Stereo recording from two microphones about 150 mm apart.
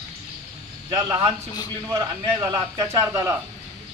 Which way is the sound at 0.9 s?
20° right (ahead or behind).